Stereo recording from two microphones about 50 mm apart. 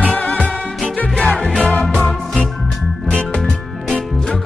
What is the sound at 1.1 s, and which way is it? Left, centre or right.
Music, centre.